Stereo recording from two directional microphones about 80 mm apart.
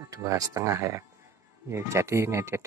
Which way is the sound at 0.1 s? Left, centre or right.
Right.